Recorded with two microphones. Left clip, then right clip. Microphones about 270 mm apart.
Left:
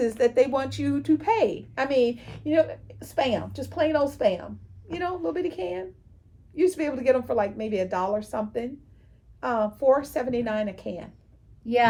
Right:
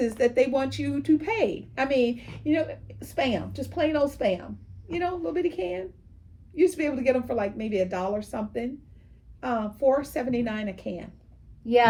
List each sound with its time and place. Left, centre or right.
0.2 s a woman's voice: centre
11.6 s a woman's voice: centre